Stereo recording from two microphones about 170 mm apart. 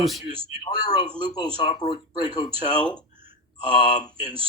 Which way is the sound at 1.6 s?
35° left (ahead or behind).